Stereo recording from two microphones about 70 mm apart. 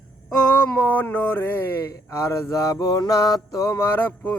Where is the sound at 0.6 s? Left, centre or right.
Left.